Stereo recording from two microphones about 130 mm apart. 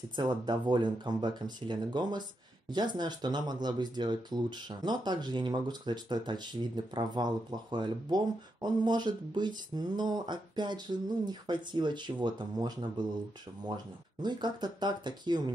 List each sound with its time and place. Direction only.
0.1 s speech: 35° right (ahead or behind)
14.2 s speech: 35° right (ahead or behind)